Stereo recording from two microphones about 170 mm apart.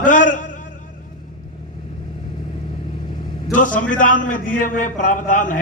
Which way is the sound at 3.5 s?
50° left (ahead or behind).